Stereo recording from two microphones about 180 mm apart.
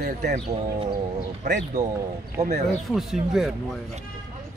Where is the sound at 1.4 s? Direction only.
45° right (ahead or behind).